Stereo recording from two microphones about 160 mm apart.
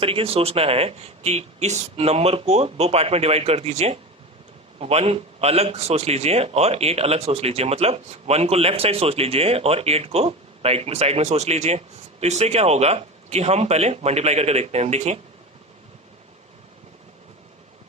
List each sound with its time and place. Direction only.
0.0 s a man's voice: 35° right (ahead or behind)